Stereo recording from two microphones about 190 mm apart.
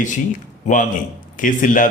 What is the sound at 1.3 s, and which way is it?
Speech, 45° left (ahead or behind).